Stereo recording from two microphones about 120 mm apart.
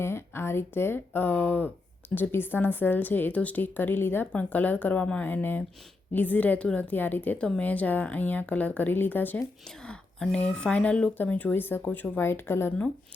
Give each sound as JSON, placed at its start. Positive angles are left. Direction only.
{"t": 0.0, "sound": "a woman's voice", "side_deg": 20}